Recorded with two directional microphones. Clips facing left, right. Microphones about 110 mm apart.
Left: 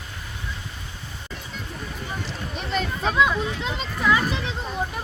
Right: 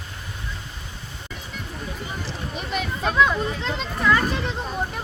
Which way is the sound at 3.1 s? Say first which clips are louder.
Right 2 dB; 5° left (ahead or behind).